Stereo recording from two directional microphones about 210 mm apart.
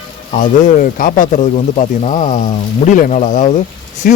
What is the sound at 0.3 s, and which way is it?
Speech, 40° left (ahead or behind).